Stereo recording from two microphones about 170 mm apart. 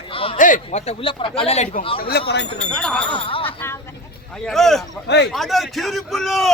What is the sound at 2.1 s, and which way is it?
Speech, 70° left (ahead or behind).